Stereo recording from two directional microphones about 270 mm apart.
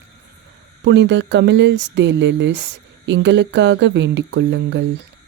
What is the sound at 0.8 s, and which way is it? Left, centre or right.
Speech, right.